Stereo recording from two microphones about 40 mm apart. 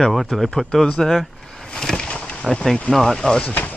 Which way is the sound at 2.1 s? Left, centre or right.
Left.